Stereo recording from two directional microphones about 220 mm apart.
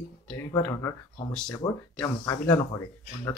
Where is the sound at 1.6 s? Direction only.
25° left (ahead or behind).